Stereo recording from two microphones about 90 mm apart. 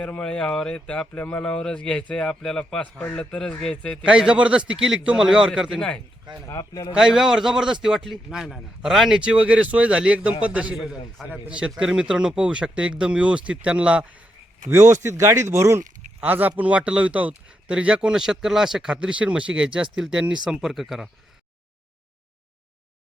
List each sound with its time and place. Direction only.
0.0 s speech: 10° left (ahead or behind)
4.0 s speech: 10° right (ahead or behind)
6.5 s a man's voice: 45° left (ahead or behind)
6.9 s speech: 5° right (ahead or behind)
10.8 s a man's voice: centre (ahead or behind)
14.7 s speech: 25° right (ahead or behind)
16.2 s speech: 20° right (ahead or behind)